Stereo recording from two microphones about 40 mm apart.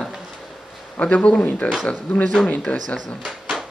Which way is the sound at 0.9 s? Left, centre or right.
Left.